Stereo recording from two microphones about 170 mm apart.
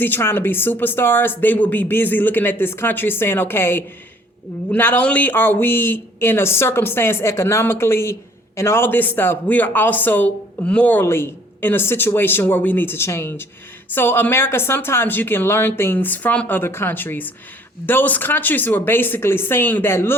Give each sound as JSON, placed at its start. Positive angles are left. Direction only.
{"t": 0.0, "sound": "speech", "side_deg": 15}